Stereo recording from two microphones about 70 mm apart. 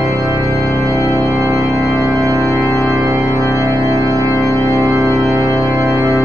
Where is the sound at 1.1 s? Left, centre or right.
Right.